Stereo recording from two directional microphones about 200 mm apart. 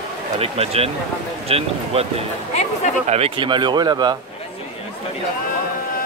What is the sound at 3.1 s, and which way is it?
Speech, 25° right (ahead or behind).